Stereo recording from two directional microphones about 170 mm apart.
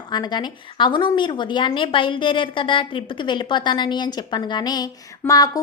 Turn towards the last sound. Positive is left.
turn(degrees=20)  # may be behind; listen again after turning